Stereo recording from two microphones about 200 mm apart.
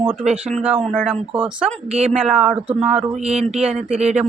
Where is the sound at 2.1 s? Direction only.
5° right (ahead or behind).